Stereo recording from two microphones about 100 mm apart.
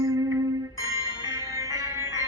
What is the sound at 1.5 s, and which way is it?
Music, 35° right (ahead or behind).